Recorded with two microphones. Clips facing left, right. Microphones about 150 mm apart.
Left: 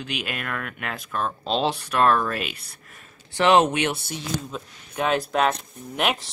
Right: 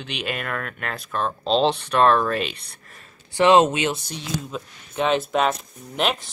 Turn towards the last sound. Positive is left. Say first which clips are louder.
# right 1 dB
turn(degrees=5)  # may be behind; listen again after turning